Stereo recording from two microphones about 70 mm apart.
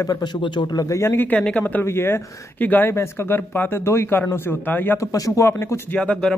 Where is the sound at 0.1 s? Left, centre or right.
Left.